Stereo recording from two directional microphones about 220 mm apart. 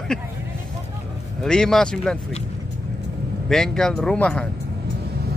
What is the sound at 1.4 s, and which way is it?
Speech, 5° left (ahead or behind).